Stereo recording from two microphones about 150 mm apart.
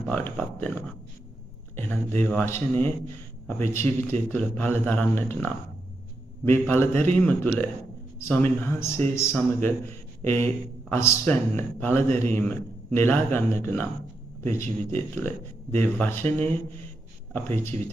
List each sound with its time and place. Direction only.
0.0 s speech: 10° left (ahead or behind)
6.7 s speech: 15° left (ahead or behind)